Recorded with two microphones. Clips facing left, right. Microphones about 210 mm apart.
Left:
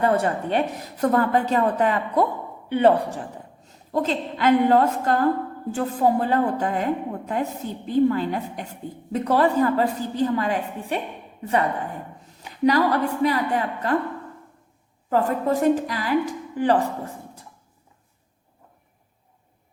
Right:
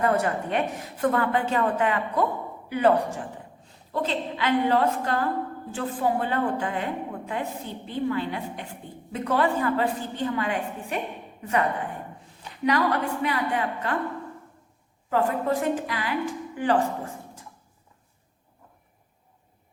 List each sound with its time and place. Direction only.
0.0 s a woman's voice: 30° left (ahead or behind)
12.2 s a woman's voice: 35° left (ahead or behind)
15.1 s a woman's voice: 40° left (ahead or behind)